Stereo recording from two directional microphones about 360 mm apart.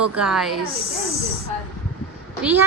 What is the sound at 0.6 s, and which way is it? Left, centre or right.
Speech, right.